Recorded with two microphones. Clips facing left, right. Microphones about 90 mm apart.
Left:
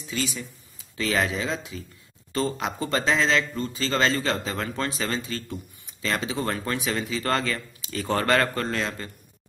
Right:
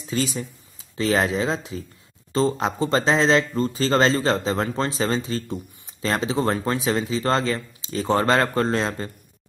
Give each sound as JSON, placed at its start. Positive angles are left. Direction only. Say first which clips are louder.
{"t": 0.0, "sound": "a man's voice", "louder": "right 5 dB", "side_deg": -35}